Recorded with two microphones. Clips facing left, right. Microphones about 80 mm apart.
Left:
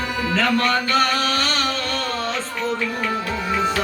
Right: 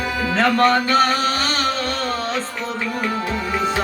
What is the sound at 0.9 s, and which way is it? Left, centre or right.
Music, right.